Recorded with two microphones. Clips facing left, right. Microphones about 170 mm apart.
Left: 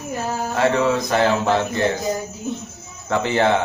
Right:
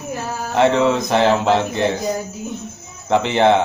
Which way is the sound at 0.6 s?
25° right (ahead or behind).